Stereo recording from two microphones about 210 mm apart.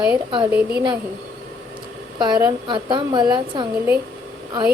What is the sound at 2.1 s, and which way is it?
Speech, 20° right (ahead or behind).